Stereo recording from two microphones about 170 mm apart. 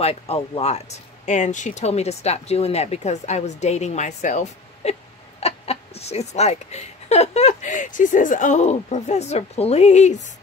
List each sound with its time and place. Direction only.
0.0 s speech: 35° left (ahead or behind)